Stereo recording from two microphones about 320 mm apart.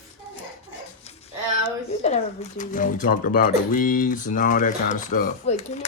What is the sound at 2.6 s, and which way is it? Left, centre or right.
Speech, left.